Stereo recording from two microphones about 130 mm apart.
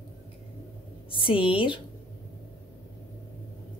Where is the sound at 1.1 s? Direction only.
40° left (ahead or behind).